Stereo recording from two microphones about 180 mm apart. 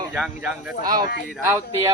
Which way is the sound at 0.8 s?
20° right (ahead or behind).